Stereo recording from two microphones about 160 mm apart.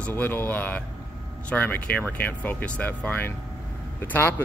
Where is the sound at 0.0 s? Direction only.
10° left (ahead or behind).